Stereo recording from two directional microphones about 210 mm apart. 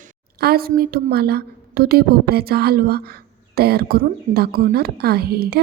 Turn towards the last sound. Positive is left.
turn(degrees=-45)  # may be behind; listen again after turning